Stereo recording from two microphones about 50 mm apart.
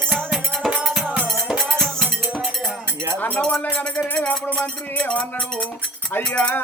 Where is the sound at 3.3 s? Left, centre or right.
Centre.